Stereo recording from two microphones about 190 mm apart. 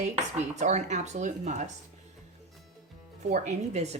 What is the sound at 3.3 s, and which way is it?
Speech, 35° right (ahead or behind).